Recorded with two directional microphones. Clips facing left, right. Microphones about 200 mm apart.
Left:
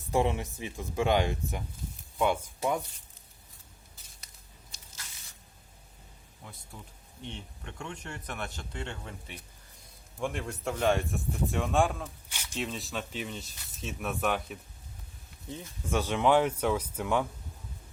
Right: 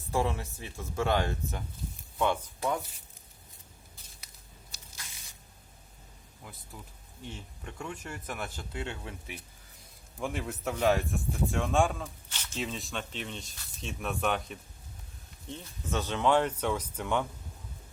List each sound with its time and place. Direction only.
0.1 s speech: 20° left (ahead or behind)
6.4 s speech: centre (ahead or behind)
12.3 s a sound: 10° left (ahead or behind)
12.5 s speech: centre (ahead or behind)